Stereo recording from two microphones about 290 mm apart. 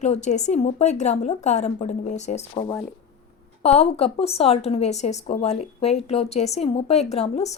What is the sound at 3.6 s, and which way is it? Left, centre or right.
Speech, left.